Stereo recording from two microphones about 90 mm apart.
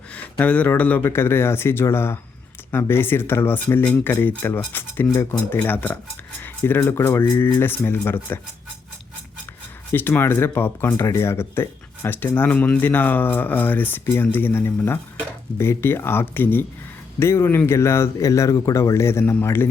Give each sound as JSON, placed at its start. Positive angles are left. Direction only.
{"t": 0.1, "sound": "speech", "side_deg": 15}
{"t": 9.9, "sound": "a man's voice", "side_deg": 25}